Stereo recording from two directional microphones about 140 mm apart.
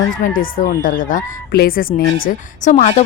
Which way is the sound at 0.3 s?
80° left.